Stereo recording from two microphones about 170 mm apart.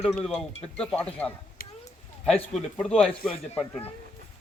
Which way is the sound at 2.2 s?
5° left (ahead or behind).